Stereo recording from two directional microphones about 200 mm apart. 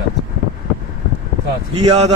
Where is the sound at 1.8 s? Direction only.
30° right (ahead or behind).